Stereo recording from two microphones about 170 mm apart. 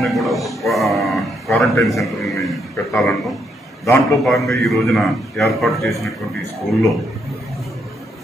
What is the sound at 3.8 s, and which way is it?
Speech, 20° left (ahead or behind).